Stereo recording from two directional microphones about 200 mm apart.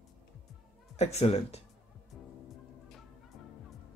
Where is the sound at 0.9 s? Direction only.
35° left (ahead or behind).